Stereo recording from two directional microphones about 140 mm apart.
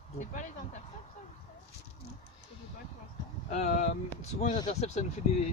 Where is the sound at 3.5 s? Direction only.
50° left (ahead or behind).